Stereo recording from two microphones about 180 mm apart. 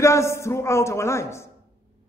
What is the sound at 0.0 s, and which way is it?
A man's voice, 15° left (ahead or behind).